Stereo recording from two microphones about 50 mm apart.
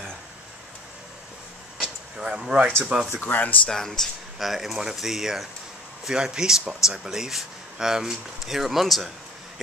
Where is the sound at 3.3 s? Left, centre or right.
Left.